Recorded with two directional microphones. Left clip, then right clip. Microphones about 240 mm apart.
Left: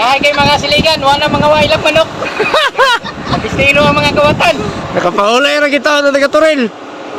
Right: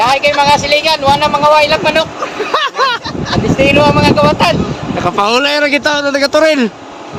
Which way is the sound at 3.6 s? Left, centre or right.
Centre.